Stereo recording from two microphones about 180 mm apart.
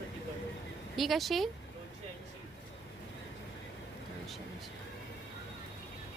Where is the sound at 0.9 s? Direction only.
Centre (ahead or behind).